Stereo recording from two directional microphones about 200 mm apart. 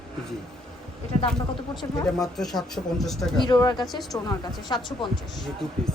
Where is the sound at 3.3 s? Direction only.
20° left (ahead or behind).